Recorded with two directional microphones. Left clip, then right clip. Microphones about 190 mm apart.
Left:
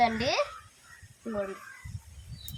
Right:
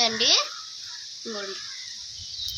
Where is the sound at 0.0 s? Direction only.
25° left (ahead or behind).